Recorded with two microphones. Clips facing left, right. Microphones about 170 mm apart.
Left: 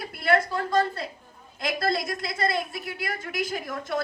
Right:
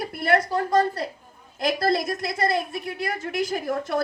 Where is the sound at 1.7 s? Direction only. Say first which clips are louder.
Right 4 dB; 30° right (ahead or behind).